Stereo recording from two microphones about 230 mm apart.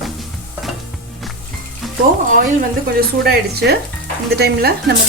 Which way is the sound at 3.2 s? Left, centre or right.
Right.